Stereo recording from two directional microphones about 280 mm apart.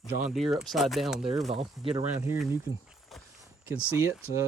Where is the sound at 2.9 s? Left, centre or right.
Centre.